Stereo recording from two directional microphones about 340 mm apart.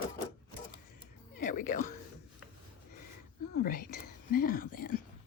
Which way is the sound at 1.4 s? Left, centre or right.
Left.